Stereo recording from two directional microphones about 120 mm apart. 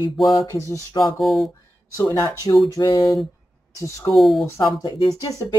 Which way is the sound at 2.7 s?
35° left (ahead or behind).